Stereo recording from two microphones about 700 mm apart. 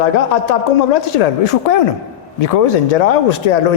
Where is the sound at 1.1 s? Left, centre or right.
Left.